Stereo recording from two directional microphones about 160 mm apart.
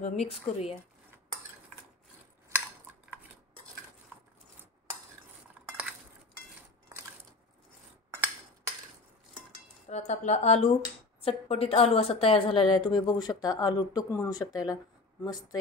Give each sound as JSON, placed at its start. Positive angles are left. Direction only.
{"t": 0.0, "sound": "speech", "side_deg": 45}
{"t": 9.8, "sound": "speech", "side_deg": 45}